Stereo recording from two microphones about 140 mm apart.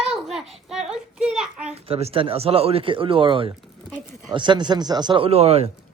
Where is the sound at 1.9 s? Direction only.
45° right (ahead or behind).